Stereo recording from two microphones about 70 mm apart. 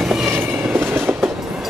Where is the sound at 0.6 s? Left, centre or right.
Right.